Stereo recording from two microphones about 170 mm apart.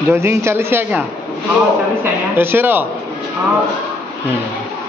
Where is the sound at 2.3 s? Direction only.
10° right (ahead or behind).